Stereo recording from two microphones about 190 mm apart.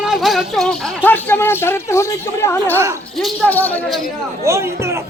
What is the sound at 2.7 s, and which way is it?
Speech, 15° right (ahead or behind).